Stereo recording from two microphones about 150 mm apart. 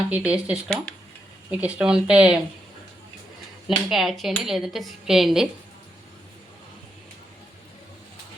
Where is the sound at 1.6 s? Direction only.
5° right (ahead or behind).